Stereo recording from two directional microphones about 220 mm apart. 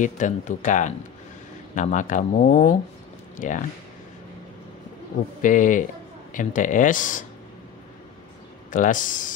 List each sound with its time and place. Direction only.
0.0 s speech: 35° left (ahead or behind)
5.4 s speech: 35° left (ahead or behind)
8.6 s speech: 35° left (ahead or behind)